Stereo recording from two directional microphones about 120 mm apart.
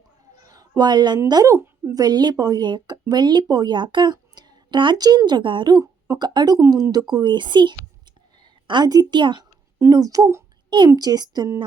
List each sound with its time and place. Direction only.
0.4 s a sound: 30° right (ahead or behind)
0.8 s a woman's voice: 35° right (ahead or behind)
9.7 s speech: 25° right (ahead or behind)
10.7 s speech: 40° right (ahead or behind)